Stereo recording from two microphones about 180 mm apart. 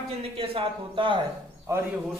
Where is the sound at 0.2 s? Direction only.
30° right (ahead or behind).